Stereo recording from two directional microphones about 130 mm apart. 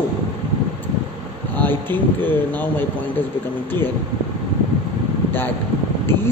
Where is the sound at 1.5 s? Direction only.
15° left (ahead or behind).